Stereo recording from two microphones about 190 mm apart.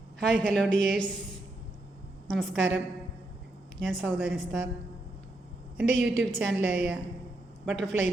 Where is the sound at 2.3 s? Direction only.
Centre (ahead or behind).